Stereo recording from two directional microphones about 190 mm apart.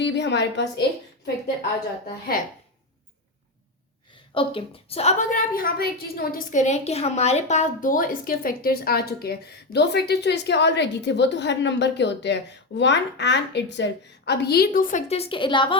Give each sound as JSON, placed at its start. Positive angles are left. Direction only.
{"t": 0.0, "sound": "a woman's voice", "side_deg": 65}
{"t": 4.4, "sound": "a woman's voice", "side_deg": 30}